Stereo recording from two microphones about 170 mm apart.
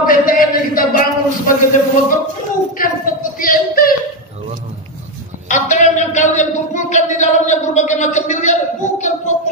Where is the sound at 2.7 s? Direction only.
55° left (ahead or behind).